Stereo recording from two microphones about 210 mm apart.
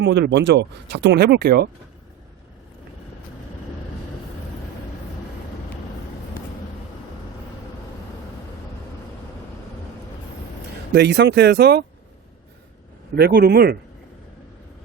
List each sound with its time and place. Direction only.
0.0 s speech: 55° right (ahead or behind)
10.9 s speech: 55° right (ahead or behind)
13.1 s speech: 50° right (ahead or behind)